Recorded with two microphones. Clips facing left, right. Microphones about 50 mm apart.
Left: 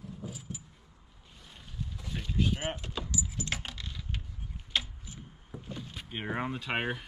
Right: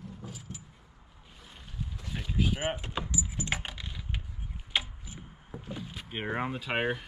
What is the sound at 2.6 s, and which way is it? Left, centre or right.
Keys jangling, centre.